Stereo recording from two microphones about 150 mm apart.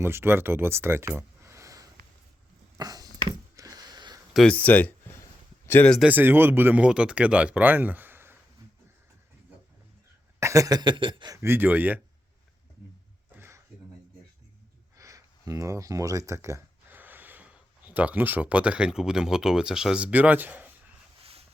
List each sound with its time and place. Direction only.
0.0 s speech: 15° right (ahead or behind)
2.7 s a sound: 25° right (ahead or behind)
4.4 s speech: 10° left (ahead or behind)
6.1 s speech: 10° right (ahead or behind)
10.4 s speech: 20° right (ahead or behind)
11.3 s speech: 15° right (ahead or behind)
13.3 s a sound: 15° right (ahead or behind)
14.9 s speech: 20° right (ahead or behind)
21.2 s a sound: 40° right (ahead or behind)